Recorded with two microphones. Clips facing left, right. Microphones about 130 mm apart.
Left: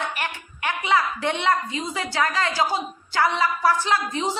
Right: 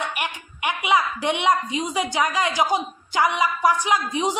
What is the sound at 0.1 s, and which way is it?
A woman's voice, 15° right (ahead or behind).